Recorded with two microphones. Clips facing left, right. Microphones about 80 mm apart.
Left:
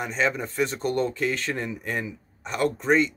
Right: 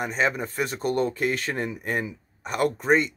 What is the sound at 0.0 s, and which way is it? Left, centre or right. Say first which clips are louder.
Speech: right 1 dB; centre.